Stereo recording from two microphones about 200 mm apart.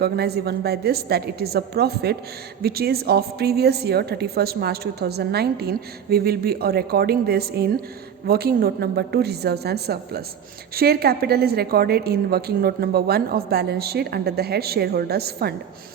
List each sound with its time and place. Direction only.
0.0 s a woman's voice: 55° right (ahead or behind)